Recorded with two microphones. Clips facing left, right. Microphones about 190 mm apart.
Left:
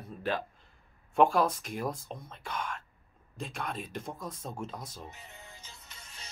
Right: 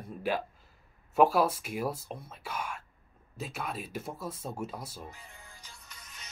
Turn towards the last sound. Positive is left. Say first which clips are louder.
# left 1 dB
turn(degrees=30)  # may be behind; listen again after turning